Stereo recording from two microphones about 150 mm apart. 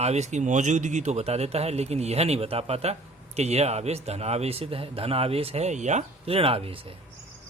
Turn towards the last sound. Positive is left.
turn(degrees=-40)  # may be behind; listen again after turning